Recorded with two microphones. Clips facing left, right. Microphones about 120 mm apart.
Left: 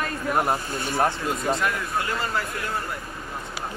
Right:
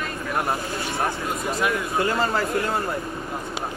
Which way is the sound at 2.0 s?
30° right (ahead or behind).